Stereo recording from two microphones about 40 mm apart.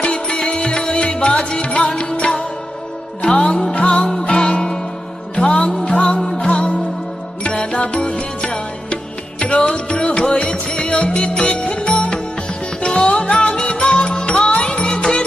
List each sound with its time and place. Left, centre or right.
0.0 s music: left
6.5 s music: left